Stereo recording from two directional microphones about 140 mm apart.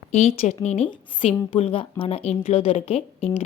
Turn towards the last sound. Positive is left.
turn(degrees=45)  # may be behind; listen again after turning